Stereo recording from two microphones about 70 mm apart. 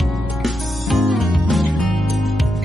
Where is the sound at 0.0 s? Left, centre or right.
Centre.